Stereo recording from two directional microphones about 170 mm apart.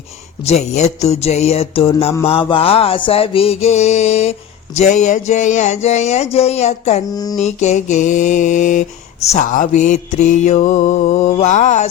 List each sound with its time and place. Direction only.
0.4 s music: 40° left (ahead or behind)
7.1 s a sound: 20° left (ahead or behind)
7.3 s mantra: 40° left (ahead or behind)